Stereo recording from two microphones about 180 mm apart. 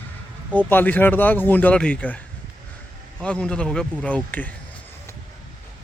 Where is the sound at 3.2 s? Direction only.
5° left (ahead or behind).